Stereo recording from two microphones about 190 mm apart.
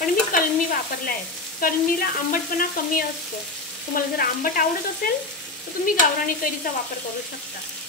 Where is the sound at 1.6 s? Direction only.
50° left (ahead or behind).